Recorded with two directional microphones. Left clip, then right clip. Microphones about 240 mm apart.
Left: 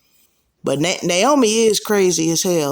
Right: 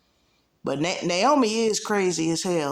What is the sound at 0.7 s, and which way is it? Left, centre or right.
Speech, left.